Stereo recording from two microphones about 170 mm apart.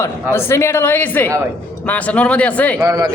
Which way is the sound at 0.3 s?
15° left (ahead or behind).